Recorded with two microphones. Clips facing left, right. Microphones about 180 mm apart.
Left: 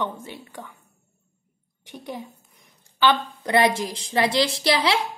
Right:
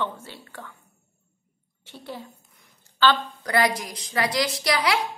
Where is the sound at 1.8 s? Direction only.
15° left (ahead or behind).